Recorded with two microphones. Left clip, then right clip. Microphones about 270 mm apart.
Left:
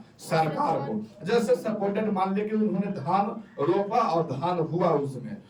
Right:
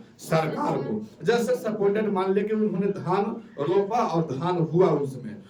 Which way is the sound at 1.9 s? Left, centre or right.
Centre.